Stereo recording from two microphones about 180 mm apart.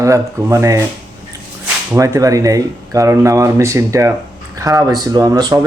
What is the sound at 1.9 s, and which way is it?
Speech, 15° right (ahead or behind).